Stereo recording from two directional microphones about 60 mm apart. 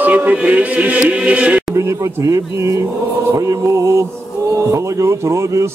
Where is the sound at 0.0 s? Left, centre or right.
Right.